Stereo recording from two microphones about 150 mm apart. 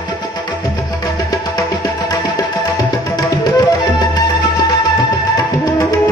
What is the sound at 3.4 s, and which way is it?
Tabla, 25° left (ahead or behind).